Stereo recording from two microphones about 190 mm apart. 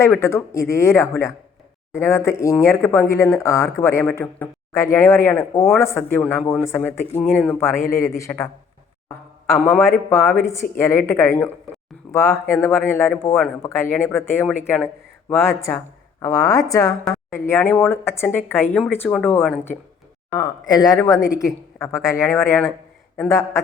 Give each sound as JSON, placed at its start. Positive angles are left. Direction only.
{"t": 0.0, "sound": "speech", "side_deg": 15}
{"t": 9.5, "sound": "speech", "side_deg": 10}
{"t": 20.3, "sound": "speech", "side_deg": 20}